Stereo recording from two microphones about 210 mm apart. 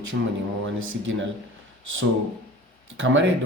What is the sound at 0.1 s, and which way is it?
Speech, 65° right (ahead or behind).